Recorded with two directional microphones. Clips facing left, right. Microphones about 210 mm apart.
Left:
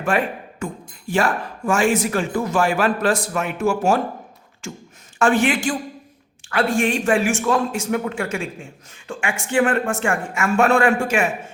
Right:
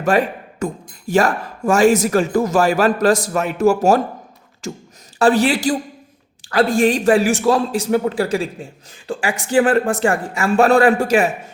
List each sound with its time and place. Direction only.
0.0 s speech: 40° right (ahead or behind)